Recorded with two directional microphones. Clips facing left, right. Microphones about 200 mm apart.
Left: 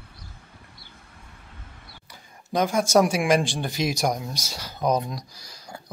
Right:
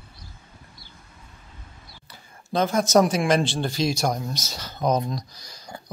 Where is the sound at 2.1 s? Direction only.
15° left (ahead or behind).